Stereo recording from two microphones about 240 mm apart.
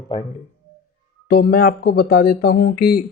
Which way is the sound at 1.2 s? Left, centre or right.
Left.